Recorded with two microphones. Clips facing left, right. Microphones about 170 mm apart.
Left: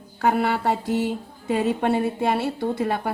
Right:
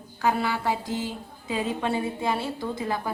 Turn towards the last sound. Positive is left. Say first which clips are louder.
# left 5 dB
turn(degrees=65)  # may be behind; listen again after turning